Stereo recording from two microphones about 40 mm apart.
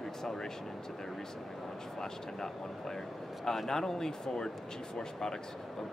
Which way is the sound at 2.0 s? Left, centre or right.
Centre.